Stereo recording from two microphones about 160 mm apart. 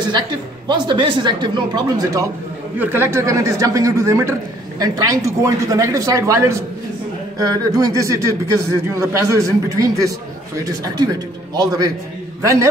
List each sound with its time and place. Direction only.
0.0 s speech: 30° right (ahead or behind)
2.8 s speech: 15° right (ahead or behind)